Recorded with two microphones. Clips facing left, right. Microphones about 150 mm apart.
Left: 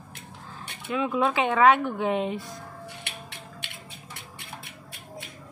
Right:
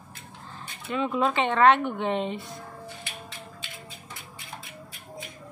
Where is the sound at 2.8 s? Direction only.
70° left (ahead or behind).